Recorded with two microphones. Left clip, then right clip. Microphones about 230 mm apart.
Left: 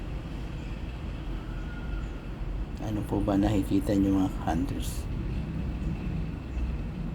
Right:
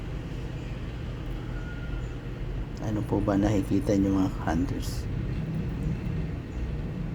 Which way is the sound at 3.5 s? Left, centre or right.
Right.